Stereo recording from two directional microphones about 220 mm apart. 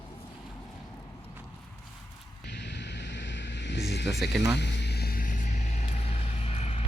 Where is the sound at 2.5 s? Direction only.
50° left (ahead or behind); by 6.8 s 30° left (ahead or behind).